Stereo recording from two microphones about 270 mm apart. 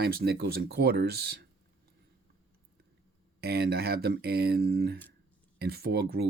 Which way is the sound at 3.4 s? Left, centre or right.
Right.